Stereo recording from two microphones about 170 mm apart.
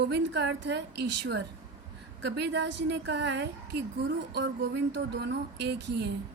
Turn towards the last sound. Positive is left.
turn(degrees=-90)